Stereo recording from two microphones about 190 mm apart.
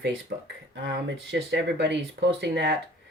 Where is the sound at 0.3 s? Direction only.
55° right (ahead or behind).